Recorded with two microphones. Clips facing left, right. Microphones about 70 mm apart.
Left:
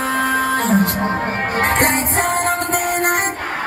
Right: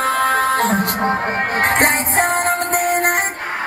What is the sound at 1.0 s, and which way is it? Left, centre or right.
Music, right.